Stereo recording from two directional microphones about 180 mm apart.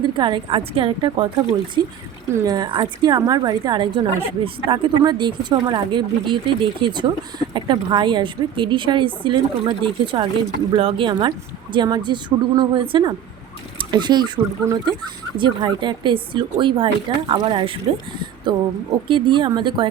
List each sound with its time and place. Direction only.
0.2 s speech: 25° right (ahead or behind)